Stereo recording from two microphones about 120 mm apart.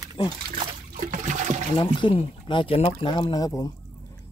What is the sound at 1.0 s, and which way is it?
Trickle, 90° right.